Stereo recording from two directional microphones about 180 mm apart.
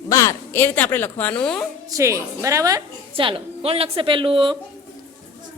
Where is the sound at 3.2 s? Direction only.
30° right (ahead or behind).